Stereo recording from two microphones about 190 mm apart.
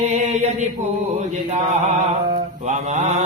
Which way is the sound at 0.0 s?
35° right (ahead or behind).